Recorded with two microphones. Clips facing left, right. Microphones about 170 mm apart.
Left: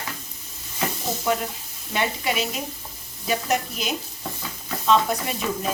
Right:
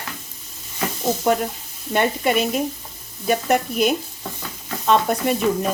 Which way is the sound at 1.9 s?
50° right (ahead or behind).